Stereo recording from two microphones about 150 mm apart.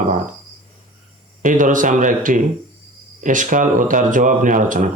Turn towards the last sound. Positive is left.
turn(degrees=-60)  # may be behind; listen again after turning